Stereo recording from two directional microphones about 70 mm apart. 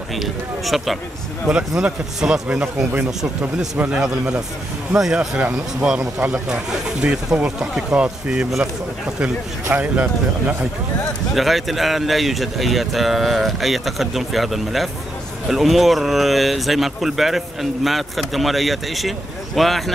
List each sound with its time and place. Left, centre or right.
0.1 s speech: centre
2.4 s speech: right
3.1 s speech: centre
9.7 s speech: right
11.3 s speech: centre